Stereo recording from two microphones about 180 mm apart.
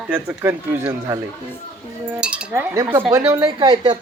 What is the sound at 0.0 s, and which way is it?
Cutlery, 10° right (ahead or behind).